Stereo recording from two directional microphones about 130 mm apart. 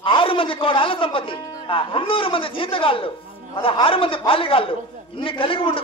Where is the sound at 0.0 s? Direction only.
40° left (ahead or behind).